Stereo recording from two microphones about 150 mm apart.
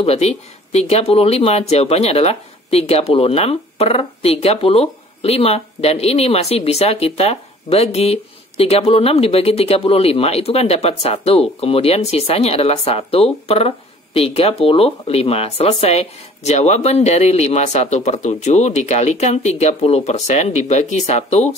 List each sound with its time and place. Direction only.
0.0 s speech: 45° left (ahead or behind)